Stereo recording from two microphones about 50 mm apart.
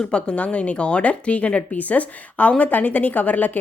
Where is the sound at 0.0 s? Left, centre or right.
Left.